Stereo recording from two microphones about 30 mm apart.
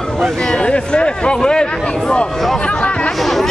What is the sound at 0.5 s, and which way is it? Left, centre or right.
Speech, left.